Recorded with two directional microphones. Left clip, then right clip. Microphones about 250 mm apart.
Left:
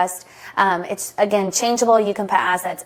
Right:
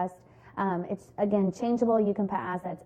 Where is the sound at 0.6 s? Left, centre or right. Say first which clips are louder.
Left 13 dB; centre.